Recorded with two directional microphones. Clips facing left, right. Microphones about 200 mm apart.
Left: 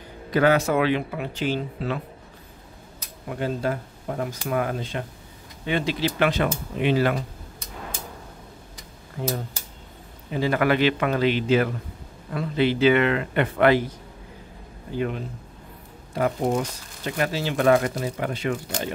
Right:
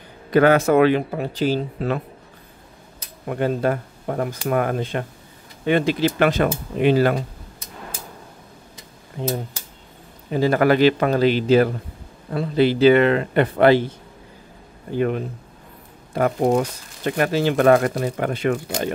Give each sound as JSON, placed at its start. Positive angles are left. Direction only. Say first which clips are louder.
{"t": 0.3, "sound": "speech", "louder": "right 5 dB", "side_deg": -55}
{"t": 3.3, "sound": "speech", "louder": "right 5 dB", "side_deg": -55}
{"t": 9.2, "sound": "speech", "louder": "right 3 dB", "side_deg": -25}
{"t": 10.3, "sound": "a man's voice", "louder": "right 5 dB", "side_deg": -40}
{"t": 15.0, "sound": "speech", "louder": "right 6 dB", "side_deg": -55}